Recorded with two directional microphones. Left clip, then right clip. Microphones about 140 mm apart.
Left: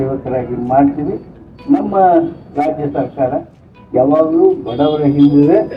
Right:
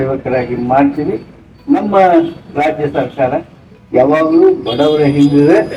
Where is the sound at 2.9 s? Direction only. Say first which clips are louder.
Right 2 dB; 20° right (ahead or behind).